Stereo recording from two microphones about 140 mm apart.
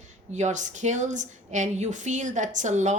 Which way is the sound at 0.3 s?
55° right (ahead or behind).